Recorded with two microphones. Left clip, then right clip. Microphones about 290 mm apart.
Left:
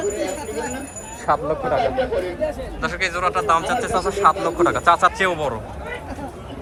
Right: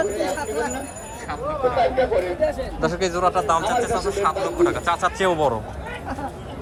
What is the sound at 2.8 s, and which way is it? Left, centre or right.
Speech, centre.